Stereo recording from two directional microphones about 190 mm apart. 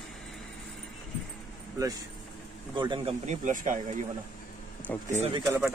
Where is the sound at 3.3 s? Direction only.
40° right (ahead or behind).